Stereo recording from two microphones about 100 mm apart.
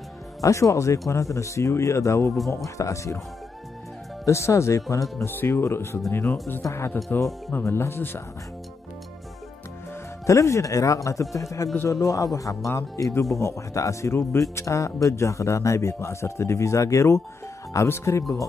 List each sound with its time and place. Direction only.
0.4 s speech: 30° left (ahead or behind)
4.3 s speech: 30° left (ahead or behind)
10.2 s speech: 30° left (ahead or behind)